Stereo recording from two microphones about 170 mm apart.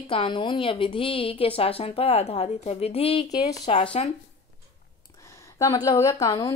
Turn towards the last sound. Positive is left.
turn(degrees=20)  # may be behind; listen again after turning